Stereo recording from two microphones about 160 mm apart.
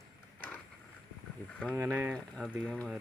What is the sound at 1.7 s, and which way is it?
Speech, 15° right (ahead or behind).